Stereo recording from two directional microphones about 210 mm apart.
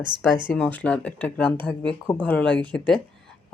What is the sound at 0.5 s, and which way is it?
Speech, 5° left (ahead or behind).